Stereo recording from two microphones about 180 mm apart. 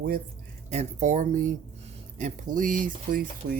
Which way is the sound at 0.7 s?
40° right (ahead or behind).